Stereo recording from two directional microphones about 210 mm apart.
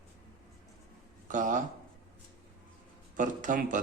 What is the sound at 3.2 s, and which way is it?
Speech, 40° right (ahead or behind).